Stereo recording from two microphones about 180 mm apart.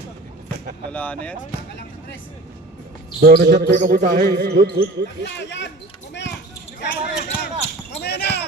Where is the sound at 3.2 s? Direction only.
60° right (ahead or behind).